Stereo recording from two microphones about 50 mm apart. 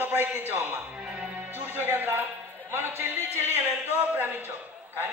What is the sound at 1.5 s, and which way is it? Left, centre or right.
Speech, right.